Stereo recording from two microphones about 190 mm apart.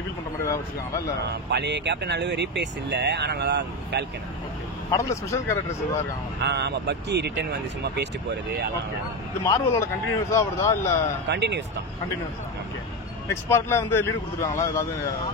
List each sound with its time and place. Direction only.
1.3 s speech: 60° right (ahead or behind)
4.9 s a man's voice: 15° left (ahead or behind)
6.4 s speech: 60° right (ahead or behind)
9.4 s a man's voice: 15° left (ahead or behind)
11.2 s speech: 65° right (ahead or behind)
13.5 s a man's voice: 15° left (ahead or behind)